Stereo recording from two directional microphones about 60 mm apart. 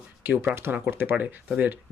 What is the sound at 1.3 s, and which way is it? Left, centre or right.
Speech, right.